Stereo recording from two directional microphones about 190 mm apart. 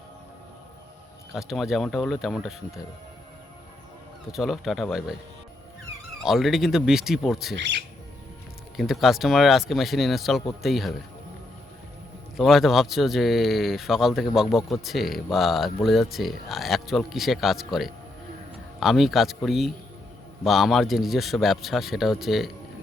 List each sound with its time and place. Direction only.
1.3 s speech: centre (ahead or behind)
4.3 s speech: centre (ahead or behind)
6.2 s speech: centre (ahead or behind)
7.5 s speech: 70° right (ahead or behind)
8.7 s speech: centre (ahead or behind)
12.4 s speech: centre (ahead or behind)